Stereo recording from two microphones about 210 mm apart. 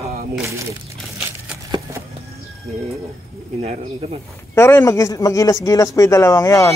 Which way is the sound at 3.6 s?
30° right (ahead or behind).